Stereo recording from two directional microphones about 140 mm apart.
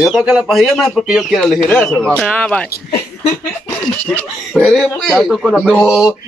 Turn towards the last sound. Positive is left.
turn(degrees=-5)  # may be behind; listen again after turning